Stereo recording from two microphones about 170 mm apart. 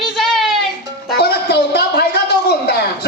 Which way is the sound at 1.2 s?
75° left (ahead or behind).